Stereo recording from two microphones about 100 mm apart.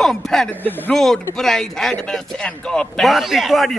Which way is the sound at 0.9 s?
5° left (ahead or behind).